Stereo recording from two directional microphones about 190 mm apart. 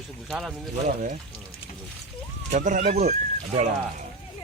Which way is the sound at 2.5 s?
40° right (ahead or behind).